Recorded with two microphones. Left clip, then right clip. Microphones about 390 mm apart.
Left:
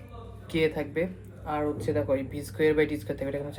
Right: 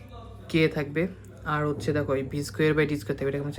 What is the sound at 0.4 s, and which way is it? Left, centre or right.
Speech, centre.